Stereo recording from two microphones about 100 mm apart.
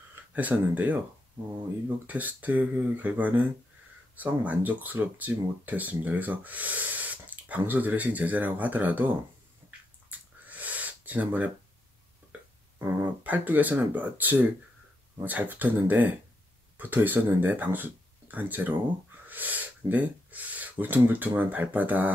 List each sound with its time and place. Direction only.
0.1 s speech: 15° right (ahead or behind)
2.0 s speech: 15° right (ahead or behind)
10.0 s a sound: 15° right (ahead or behind)
12.7 s speech: 20° right (ahead or behind)